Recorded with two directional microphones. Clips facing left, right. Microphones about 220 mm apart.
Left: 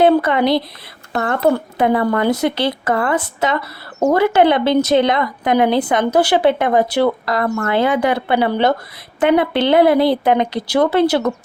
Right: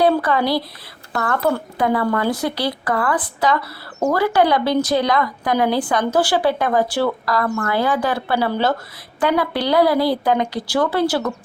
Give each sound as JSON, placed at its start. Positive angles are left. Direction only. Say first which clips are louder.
{"t": 0.0, "sound": "speech", "louder": "left 4 dB", "side_deg": 20}